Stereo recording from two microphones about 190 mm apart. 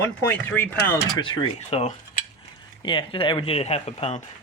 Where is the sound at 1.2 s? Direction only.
25° left (ahead or behind).